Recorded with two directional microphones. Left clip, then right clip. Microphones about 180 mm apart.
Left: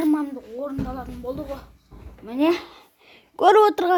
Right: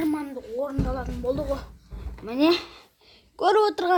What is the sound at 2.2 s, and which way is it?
Speech, 30° left (ahead or behind).